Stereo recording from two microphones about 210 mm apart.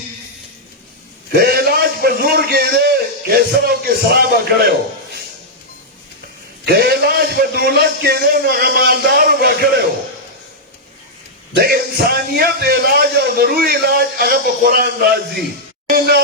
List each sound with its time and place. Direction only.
1.4 s a sound: 50° right (ahead or behind)
4.1 s a man's voice: 50° right (ahead or behind)
6.7 s a man's voice: 50° right (ahead or behind)
11.5 s a man's voice: 50° right (ahead or behind)